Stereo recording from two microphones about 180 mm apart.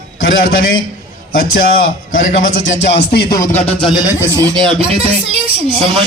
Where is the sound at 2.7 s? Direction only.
80° left.